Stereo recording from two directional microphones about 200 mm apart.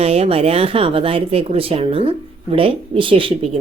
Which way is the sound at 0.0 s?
30° right (ahead or behind).